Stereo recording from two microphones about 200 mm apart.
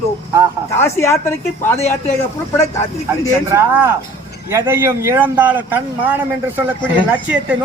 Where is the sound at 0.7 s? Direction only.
15° left (ahead or behind).